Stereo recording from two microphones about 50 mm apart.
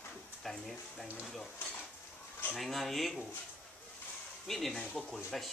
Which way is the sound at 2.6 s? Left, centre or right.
Centre.